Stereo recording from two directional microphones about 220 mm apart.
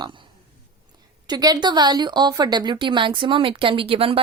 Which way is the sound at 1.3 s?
20° right (ahead or behind).